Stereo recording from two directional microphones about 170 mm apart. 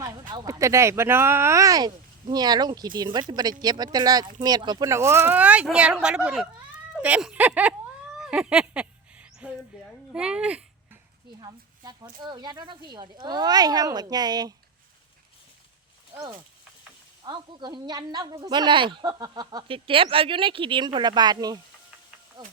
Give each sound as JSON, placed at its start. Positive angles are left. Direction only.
{"t": 0.0, "sound": "speech", "side_deg": -20}
{"t": 8.2, "sound": "a sound", "side_deg": -5}
{"t": 10.1, "sound": "speech", "side_deg": -5}
{"t": 11.3, "sound": "speech", "side_deg": -25}
{"t": 17.2, "sound": "speech", "side_deg": -25}